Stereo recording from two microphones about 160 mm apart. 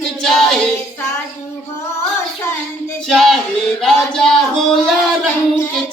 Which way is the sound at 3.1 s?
Centre (ahead or behind).